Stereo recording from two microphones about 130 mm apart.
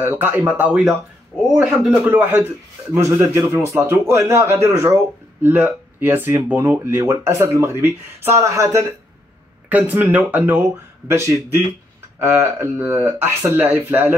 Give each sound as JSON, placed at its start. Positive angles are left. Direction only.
{"t": 0.0, "sound": "a man's voice", "side_deg": -15}
{"t": 2.0, "sound": "speech", "side_deg": -15}
{"t": 9.7, "sound": "speech", "side_deg": -10}